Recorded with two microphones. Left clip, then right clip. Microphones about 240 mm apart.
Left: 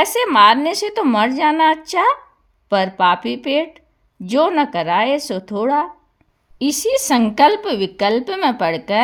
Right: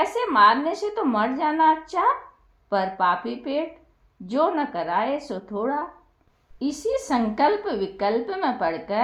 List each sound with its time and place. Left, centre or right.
0.0 s a woman's voice: left